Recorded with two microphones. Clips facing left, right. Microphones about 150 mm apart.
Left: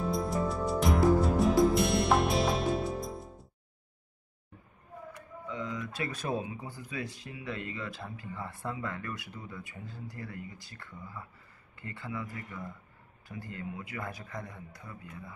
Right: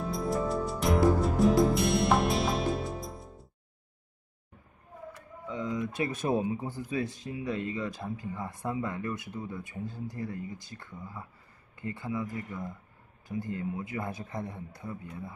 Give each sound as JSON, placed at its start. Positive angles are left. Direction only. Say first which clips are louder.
{"t": 0.0, "sound": "music", "louder": "even", "side_deg": 0}
{"t": 5.5, "sound": "speech", "louder": "right 5 dB", "side_deg": -25}